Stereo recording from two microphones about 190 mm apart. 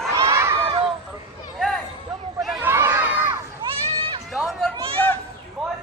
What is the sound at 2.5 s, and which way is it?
Crowd, 10° right (ahead or behind).